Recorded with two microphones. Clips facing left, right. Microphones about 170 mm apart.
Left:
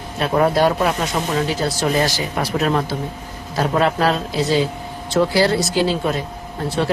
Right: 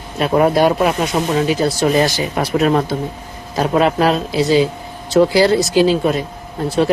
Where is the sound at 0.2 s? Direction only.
15° right (ahead or behind).